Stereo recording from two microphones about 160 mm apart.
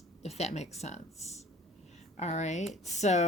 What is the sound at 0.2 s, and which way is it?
Speech, 45° left (ahead or behind).